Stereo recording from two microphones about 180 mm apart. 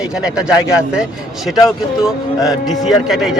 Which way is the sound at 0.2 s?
5° right (ahead or behind).